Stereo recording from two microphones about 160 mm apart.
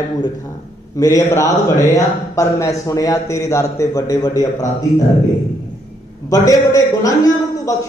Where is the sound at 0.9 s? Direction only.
20° left (ahead or behind).